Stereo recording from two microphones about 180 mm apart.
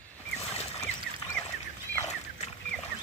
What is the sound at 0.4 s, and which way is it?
Duck, 35° left (ahead or behind).